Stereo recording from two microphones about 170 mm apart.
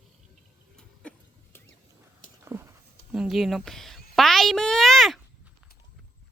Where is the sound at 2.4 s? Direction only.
15° right (ahead or behind).